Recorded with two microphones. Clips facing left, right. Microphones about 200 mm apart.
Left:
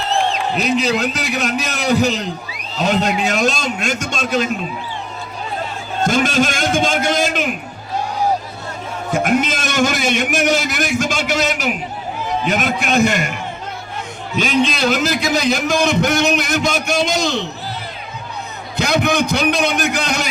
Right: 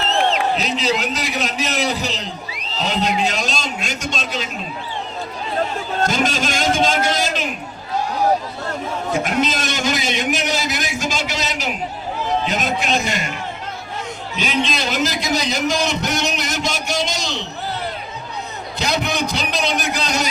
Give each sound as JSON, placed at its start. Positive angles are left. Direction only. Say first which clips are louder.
{"t": 0.5, "sound": "a man's voice", "louder": "left 3 dB", "side_deg": 50}
{"t": 6.1, "sound": "a man's voice", "louder": "left 8 dB", "side_deg": 55}
{"t": 9.1, "sound": "a man's voice", "louder": "left 4 dB", "side_deg": 50}
{"t": 14.3, "sound": "a man's voice", "louder": "left 5 dB", "side_deg": 50}
{"t": 18.8, "sound": "a man's voice", "louder": "left 5 dB", "side_deg": 50}